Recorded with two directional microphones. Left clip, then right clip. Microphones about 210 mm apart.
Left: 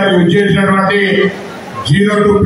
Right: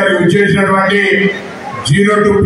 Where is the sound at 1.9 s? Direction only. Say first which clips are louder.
Right 1 dB; 60° right (ahead or behind).